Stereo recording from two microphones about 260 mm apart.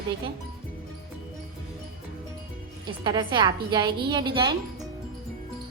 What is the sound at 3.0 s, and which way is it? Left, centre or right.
A woman's voice, centre.